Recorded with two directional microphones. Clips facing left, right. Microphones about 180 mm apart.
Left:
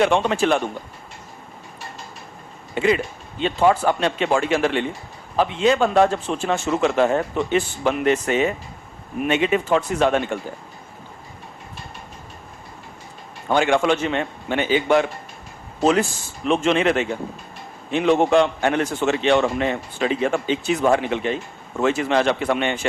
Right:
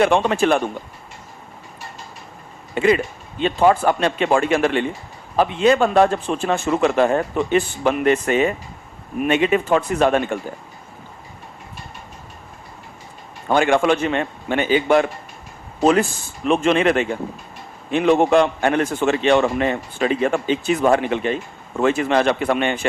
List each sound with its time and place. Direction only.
0.0 s a man's voice: 55° right (ahead or behind)
2.7 s a man's voice: 50° right (ahead or behind)
13.5 s a man's voice: 50° right (ahead or behind)